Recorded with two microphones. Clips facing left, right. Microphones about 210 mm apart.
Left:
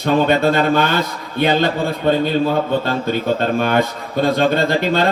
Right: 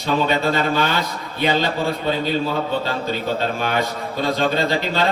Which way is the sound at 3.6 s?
55° left (ahead or behind).